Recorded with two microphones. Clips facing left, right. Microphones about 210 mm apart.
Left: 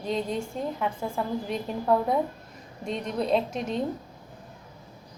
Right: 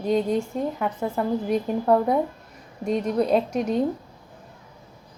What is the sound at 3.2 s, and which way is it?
Speech, 5° right (ahead or behind).